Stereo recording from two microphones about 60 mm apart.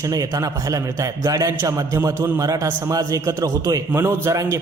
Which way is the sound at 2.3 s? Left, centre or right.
Right.